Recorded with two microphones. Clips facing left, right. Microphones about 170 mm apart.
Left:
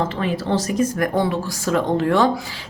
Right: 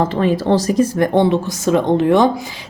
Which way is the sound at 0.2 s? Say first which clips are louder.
Right 6 dB; 35° right (ahead or behind).